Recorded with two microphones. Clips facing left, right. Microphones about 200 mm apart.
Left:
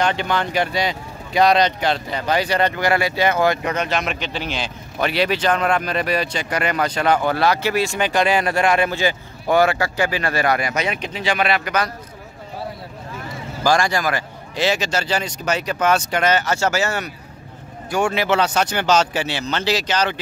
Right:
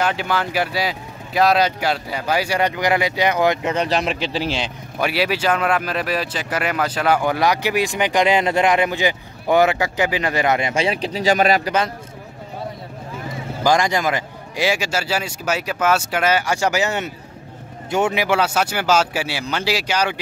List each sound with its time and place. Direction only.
0.0 s speech: 5° right (ahead or behind)
3.7 s speech: 30° right (ahead or behind)
4.9 s speech: 5° right (ahead or behind); by 11.7 s 40° right (ahead or behind)
13.7 s speech: 20° right (ahead or behind)